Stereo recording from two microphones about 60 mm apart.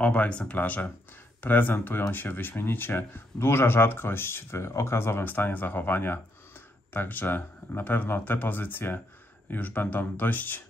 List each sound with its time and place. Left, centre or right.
0.0 s speech: centre